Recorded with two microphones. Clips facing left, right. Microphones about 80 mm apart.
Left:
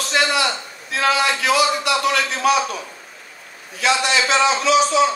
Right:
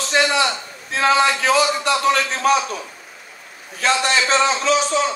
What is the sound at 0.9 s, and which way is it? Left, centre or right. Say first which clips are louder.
A man's voice: right 2 dB; right.